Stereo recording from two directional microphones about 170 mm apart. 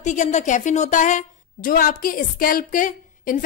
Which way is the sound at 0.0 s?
45° left (ahead or behind).